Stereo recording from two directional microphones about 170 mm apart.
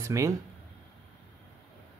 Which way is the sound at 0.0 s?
15° right (ahead or behind).